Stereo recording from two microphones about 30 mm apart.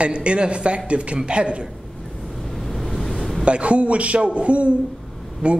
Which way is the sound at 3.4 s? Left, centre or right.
Right.